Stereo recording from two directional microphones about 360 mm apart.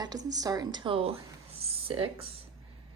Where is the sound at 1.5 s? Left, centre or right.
Centre.